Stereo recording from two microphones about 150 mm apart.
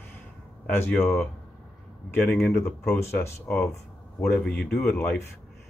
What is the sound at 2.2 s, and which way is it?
Speech, 10° left (ahead or behind).